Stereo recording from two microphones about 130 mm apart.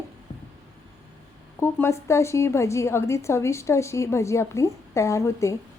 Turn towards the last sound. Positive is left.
turn(degrees=25)  # may be behind; listen again after turning